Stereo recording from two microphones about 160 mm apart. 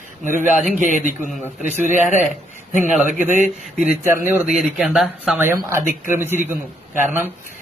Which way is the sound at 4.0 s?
15° right (ahead or behind).